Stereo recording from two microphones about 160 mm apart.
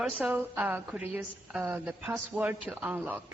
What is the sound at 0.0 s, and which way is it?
A woman's voice, 5° right (ahead or behind).